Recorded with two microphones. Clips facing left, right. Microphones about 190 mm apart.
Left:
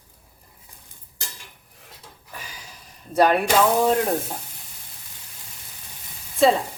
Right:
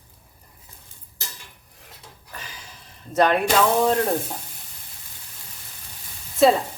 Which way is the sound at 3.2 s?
5° left (ahead or behind).